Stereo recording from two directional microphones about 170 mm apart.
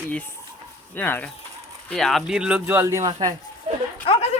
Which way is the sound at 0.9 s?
10° left (ahead or behind).